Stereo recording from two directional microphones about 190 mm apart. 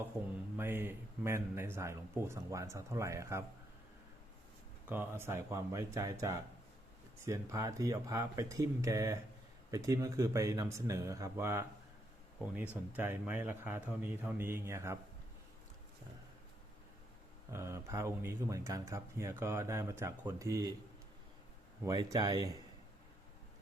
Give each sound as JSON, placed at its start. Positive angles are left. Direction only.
{"t": 0.5, "sound": "speech", "side_deg": -10}
{"t": 4.9, "sound": "speech", "side_deg": -10}
{"t": 17.5, "sound": "speech", "side_deg": -15}
{"t": 21.8, "sound": "speech", "side_deg": -20}